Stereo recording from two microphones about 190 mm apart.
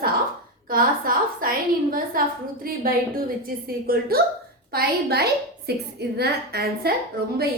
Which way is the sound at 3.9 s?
50° right (ahead or behind).